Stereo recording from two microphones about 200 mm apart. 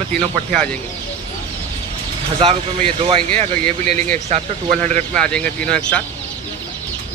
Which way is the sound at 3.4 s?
35° right (ahead or behind).